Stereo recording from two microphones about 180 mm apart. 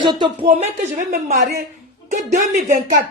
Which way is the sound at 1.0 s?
55° right (ahead or behind).